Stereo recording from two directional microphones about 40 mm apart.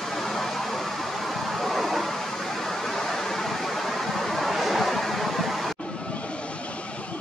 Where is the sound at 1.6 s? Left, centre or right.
Centre.